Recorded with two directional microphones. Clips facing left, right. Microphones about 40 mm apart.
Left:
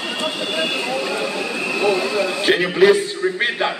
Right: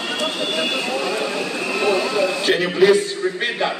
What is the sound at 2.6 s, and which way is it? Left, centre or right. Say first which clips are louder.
Speech: left 1 dB; centre.